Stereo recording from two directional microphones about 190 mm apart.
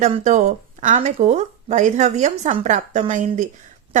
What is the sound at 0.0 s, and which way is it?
A woman's voice, 40° right (ahead or behind).